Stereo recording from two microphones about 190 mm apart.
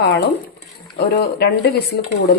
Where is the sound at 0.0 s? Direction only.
60° left (ahead or behind).